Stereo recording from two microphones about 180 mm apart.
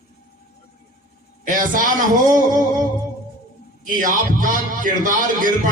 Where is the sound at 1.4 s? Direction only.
45° right (ahead or behind).